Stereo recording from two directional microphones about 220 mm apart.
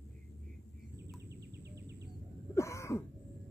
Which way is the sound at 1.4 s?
50° right (ahead or behind).